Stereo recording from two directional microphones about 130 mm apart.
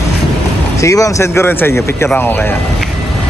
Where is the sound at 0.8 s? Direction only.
25° left (ahead or behind).